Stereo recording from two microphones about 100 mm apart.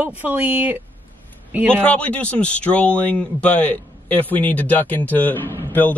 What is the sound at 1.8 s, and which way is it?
Speech, 15° left (ahead or behind).